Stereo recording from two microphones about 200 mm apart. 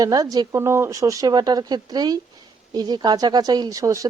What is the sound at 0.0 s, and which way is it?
Speech, 20° right (ahead or behind).